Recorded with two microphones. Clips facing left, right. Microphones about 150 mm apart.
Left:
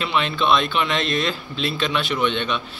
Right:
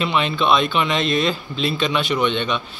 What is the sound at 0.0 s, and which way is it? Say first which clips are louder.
Speech: right 2 dB; centre (ahead or behind).